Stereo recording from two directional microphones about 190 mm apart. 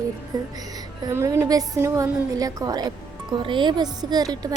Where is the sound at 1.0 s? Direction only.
15° right (ahead or behind).